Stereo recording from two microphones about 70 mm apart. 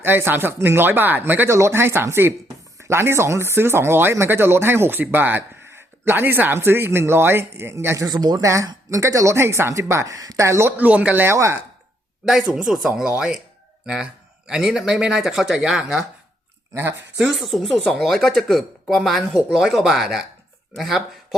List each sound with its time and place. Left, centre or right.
0.0 s speech: right
1.5 s speech: right
7.9 s speech: right
8.4 s speech: right
10.4 s speech: right
10.8 s speech: centre
11.3 s speech: right
12.3 s speech: centre
16.7 s speech: right
17.2 s speech: centre
19.5 s speech: centre